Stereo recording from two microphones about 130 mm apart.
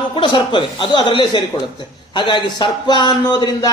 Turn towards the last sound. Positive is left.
turn(degrees=35)  # may be behind; listen again after turning